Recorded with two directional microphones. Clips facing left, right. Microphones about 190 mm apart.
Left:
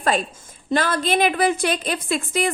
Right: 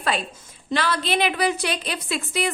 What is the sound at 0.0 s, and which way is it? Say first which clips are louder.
A woman's voice: left 4 dB; 45° left (ahead or behind).